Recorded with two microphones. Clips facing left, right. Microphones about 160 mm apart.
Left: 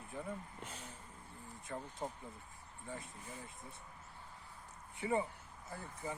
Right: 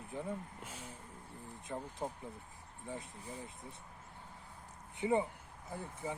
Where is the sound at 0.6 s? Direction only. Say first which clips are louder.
Right 1 dB; 10° right (ahead or behind).